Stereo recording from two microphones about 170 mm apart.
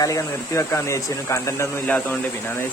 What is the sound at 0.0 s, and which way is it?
Speech, 20° left (ahead or behind).